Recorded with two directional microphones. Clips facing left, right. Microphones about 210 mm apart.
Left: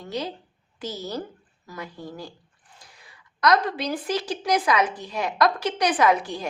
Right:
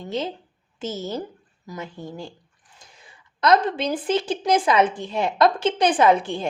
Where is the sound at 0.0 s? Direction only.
25° right (ahead or behind).